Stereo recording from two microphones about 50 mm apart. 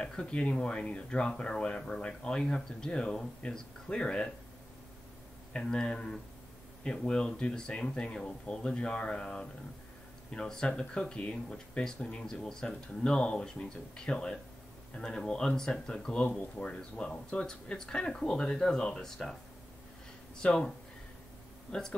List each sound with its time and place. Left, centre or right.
0.0 s speech: centre
5.5 s speech: centre
20.4 s speech: centre
21.7 s speech: centre